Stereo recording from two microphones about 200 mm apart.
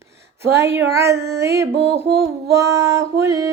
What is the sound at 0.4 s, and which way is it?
A woman's voice, 15° right (ahead or behind).